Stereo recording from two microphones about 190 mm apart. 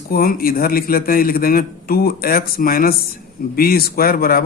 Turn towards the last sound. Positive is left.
turn(degrees=50)  # may be behind; listen again after turning